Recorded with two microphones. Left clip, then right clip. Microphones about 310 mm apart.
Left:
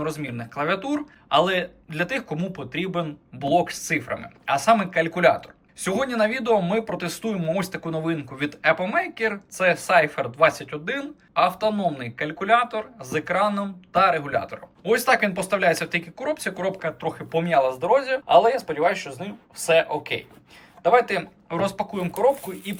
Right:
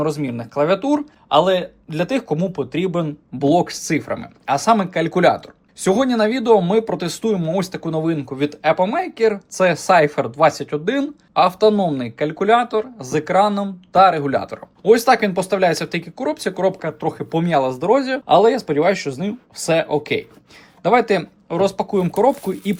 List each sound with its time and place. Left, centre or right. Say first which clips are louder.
0.0 s speech: right 7 dB; centre